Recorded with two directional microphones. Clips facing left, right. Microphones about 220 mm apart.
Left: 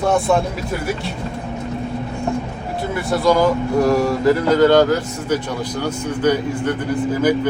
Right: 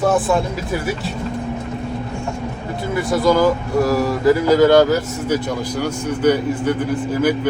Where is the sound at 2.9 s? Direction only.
Centre (ahead or behind).